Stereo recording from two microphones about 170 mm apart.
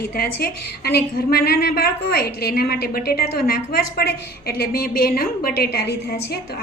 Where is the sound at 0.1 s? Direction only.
65° left (ahead or behind).